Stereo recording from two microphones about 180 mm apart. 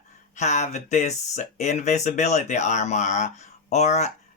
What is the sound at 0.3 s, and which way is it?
Speech, 40° left (ahead or behind).